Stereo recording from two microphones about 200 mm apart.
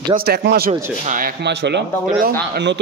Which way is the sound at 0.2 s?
50° right (ahead or behind).